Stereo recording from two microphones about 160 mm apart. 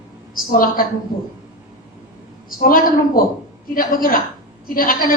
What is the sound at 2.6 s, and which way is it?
A woman's voice, 65° left (ahead or behind).